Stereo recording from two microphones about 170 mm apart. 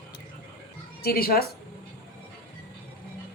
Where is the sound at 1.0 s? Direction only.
60° left (ahead or behind).